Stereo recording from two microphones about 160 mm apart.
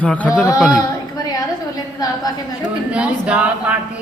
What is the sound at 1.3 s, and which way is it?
A woman's voice, 25° left (ahead or behind).